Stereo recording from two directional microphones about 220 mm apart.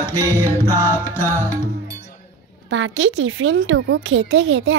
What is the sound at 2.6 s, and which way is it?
A woman's voice, 60° right (ahead or behind).